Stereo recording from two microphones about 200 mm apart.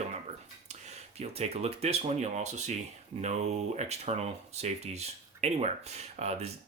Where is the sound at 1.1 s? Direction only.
30° right (ahead or behind).